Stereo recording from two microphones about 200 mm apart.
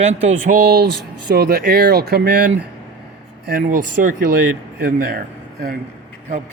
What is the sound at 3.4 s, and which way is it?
A man's voice, 45° right (ahead or behind).